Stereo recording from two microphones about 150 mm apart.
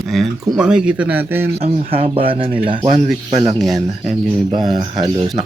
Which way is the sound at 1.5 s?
40° right (ahead or behind).